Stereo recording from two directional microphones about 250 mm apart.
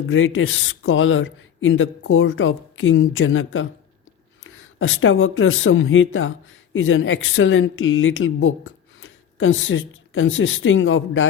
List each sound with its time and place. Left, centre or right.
0.1 s speech: left